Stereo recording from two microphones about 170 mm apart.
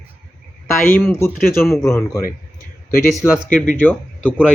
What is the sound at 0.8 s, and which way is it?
Speech, 15° left (ahead or behind).